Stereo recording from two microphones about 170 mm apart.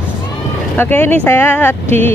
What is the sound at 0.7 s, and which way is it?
Speech, 10° left (ahead or behind).